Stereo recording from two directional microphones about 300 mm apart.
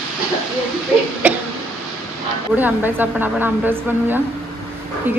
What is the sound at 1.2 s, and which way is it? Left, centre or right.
Cough, centre.